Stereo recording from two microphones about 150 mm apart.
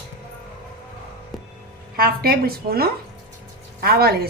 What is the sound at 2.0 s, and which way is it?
A woman's voice, 90° right.